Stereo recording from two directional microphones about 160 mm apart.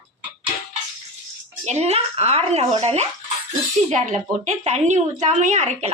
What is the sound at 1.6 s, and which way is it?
A woman's voice, 45° right (ahead or behind).